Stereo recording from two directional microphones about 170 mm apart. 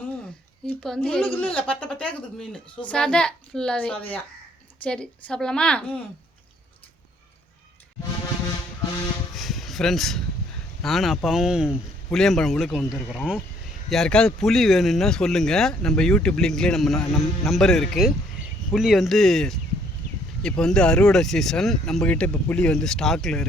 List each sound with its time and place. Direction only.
0.7 s speech: 5° left (ahead or behind)
9.3 s a sound: centre (ahead or behind)
10.8 s speech: centre (ahead or behind)